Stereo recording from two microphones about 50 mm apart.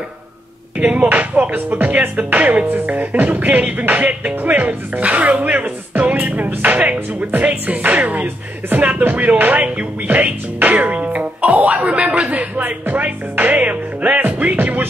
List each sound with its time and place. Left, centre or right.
0.7 s speech: right
1.0 s music: right
7.2 s speech: right
12.8 s music: right